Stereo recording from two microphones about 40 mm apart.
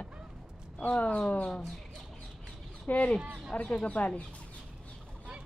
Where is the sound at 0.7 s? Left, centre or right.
Left.